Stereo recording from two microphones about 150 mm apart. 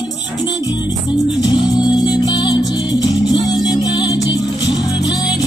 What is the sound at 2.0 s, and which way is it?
Music, 30° left (ahead or behind).